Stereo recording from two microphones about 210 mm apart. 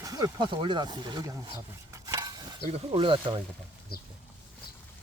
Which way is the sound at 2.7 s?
25° right (ahead or behind).